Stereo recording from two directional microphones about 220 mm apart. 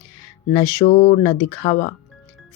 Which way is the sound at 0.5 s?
30° left (ahead or behind).